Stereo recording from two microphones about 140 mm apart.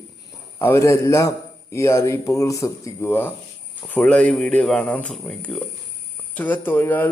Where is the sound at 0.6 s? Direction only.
20° left (ahead or behind).